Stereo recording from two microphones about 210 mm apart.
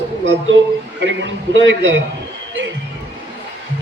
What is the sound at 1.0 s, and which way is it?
Speech, 60° right (ahead or behind).